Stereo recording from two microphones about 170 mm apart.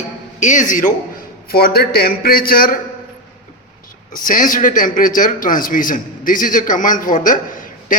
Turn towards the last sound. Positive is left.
turn(degrees=50)  # may be behind; listen again after turning